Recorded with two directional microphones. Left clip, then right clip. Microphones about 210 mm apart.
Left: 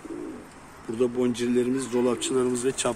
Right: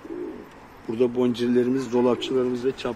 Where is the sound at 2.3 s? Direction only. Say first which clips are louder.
Right 1 dB; 5° left (ahead or behind).